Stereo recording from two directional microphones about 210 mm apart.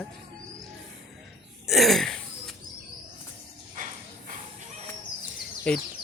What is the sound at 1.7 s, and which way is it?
Throat clearing, centre (ahead or behind).